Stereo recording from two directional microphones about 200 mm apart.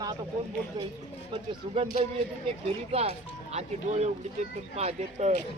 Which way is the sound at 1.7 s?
30° right (ahead or behind).